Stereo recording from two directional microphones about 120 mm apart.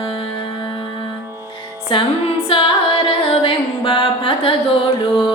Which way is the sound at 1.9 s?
45° left (ahead or behind).